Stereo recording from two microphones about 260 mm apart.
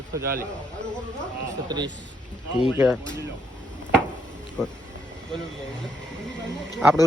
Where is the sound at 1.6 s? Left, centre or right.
Centre.